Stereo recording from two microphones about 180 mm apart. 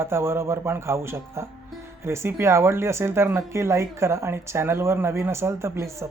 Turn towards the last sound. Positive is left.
turn(degrees=-15)  # may be behind; listen again after turning